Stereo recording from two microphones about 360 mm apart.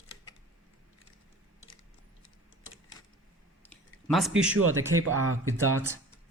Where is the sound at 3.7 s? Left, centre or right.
Centre.